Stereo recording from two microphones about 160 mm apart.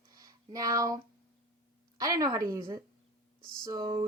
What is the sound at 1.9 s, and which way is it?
Speech, 20° right (ahead or behind).